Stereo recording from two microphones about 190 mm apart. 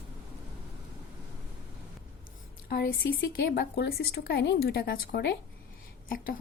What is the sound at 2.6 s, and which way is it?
A woman's voice, 55° left (ahead or behind).